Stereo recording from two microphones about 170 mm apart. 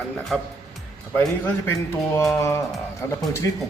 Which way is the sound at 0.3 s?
5° left (ahead or behind).